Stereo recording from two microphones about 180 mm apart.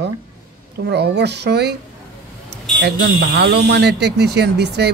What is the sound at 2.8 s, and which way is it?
Speech, 65° right (ahead or behind).